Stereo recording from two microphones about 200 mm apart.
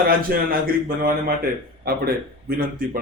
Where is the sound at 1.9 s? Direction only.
50° right (ahead or behind).